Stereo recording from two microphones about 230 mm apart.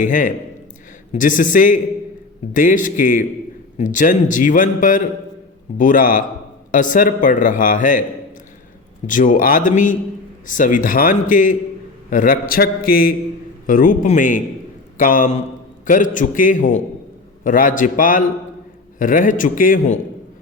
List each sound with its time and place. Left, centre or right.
0.0 s a man's voice: left
9.0 s a man's voice: left